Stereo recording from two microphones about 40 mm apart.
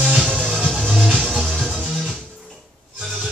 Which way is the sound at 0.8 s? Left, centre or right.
Centre.